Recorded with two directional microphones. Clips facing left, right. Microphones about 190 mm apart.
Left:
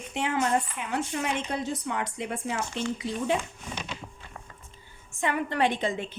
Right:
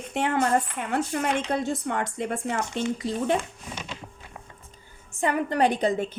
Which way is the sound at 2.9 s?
55° right (ahead or behind).